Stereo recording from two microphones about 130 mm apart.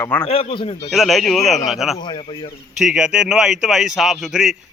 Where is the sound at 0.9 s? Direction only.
Centre (ahead or behind).